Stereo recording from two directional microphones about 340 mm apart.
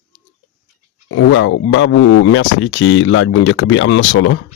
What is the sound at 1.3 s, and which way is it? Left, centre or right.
Speech, left.